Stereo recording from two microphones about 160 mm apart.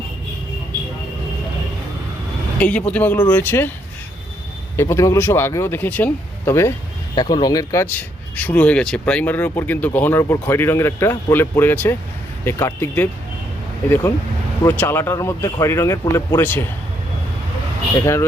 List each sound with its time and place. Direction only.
2.6 s speech: 10° left (ahead or behind)
4.8 s speech: 20° left (ahead or behind)
7.2 s speech: 25° left (ahead or behind)
14.6 s speech: 15° left (ahead or behind)
18.0 s speech: 15° left (ahead or behind)